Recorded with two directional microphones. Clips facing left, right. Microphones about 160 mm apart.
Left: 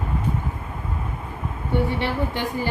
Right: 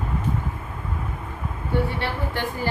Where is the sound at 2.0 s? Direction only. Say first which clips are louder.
Left 3 dB; 15° left (ahead or behind).